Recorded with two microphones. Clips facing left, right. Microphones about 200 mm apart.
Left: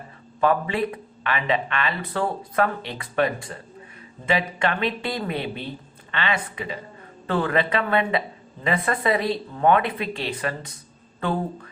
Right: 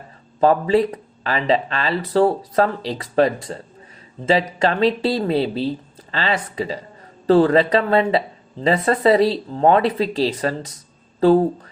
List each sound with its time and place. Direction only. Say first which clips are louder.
0.3 s speech: right 6 dB; 35° right (ahead or behind)